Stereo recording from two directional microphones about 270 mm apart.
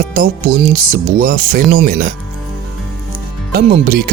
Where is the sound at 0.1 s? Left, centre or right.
Right.